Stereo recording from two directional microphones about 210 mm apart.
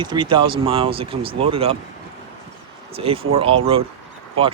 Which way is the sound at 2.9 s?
25° right (ahead or behind).